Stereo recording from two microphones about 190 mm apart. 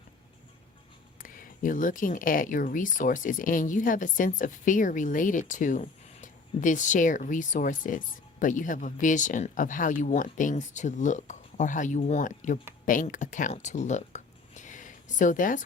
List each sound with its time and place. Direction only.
1.2 s speech: 45° left (ahead or behind)